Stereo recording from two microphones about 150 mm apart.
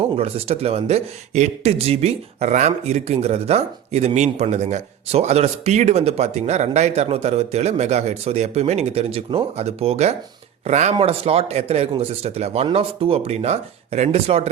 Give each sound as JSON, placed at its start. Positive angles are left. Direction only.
{"t": 0.0, "sound": "speech", "side_deg": -40}